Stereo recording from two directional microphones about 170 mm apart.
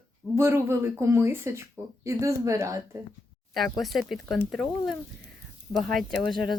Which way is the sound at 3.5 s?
Centre (ahead or behind).